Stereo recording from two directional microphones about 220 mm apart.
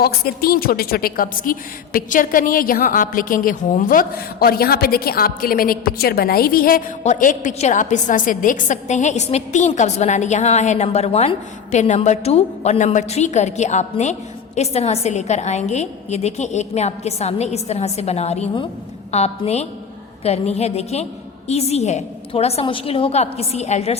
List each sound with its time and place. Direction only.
0.0 s a woman's voice: 45° left (ahead or behind)